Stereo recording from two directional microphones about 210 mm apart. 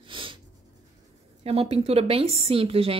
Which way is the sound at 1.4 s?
30° right (ahead or behind).